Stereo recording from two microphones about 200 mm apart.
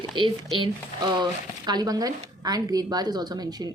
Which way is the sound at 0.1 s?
25° right (ahead or behind).